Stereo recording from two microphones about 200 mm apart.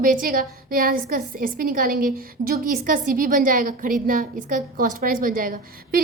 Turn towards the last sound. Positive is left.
turn(degrees=-45)  # may be behind; listen again after turning